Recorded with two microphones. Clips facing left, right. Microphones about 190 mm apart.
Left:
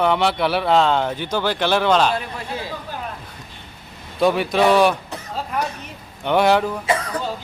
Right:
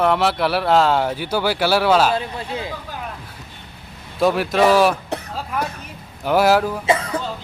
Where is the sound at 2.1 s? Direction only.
20° right (ahead or behind).